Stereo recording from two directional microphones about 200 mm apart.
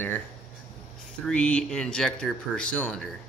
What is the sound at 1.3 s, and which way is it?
Speech, 5° left (ahead or behind).